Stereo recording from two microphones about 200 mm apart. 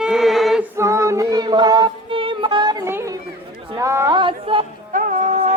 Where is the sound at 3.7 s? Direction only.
15° right (ahead or behind).